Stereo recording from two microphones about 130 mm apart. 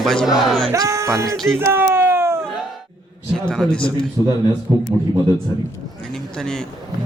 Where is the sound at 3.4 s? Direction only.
10° left (ahead or behind).